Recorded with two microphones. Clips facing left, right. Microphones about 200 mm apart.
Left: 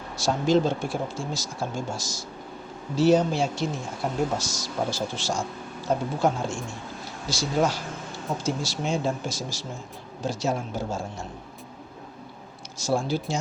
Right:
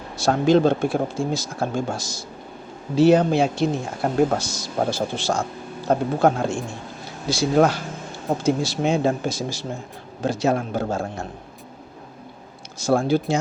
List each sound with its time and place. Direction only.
0.2 s speech: 60° right (ahead or behind)
12.8 s speech: 55° right (ahead or behind)